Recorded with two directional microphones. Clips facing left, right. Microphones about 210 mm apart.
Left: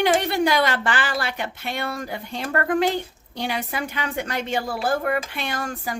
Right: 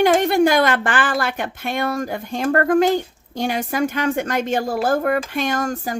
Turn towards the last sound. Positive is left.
turn(degrees=-40)  # may be behind; listen again after turning